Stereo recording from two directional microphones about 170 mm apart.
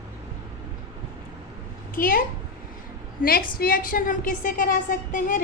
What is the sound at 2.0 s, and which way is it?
A woman's voice, 55° left (ahead or behind).